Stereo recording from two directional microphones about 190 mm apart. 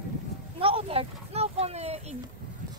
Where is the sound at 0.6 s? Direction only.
30° right (ahead or behind).